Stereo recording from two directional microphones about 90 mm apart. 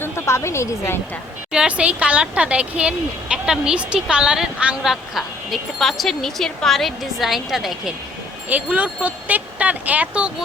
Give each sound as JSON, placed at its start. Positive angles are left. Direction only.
{"t": 0.0, "sound": "a woman's voice", "side_deg": 30}
{"t": 1.5, "sound": "speech", "side_deg": -15}
{"t": 8.4, "sound": "speech", "side_deg": -15}